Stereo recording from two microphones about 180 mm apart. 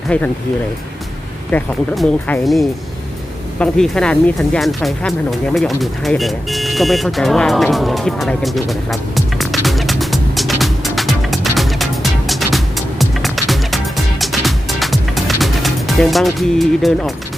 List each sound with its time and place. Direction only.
0.1 s speech: 5° left (ahead or behind)
1.5 s speech: 10° left (ahead or behind)
5.5 s vehicle: centre (ahead or behind)
12.3 s music: centre (ahead or behind)